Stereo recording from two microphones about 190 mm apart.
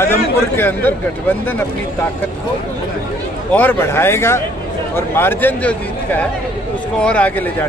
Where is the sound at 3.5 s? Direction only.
10° left (ahead or behind).